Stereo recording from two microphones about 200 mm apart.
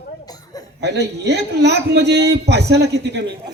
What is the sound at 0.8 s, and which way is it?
A man's voice, 55° right (ahead or behind).